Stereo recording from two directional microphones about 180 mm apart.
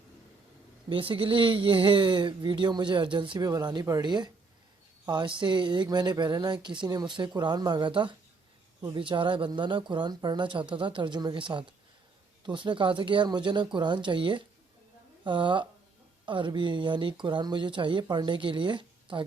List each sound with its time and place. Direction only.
0.9 s a woman's voice: 30° right (ahead or behind)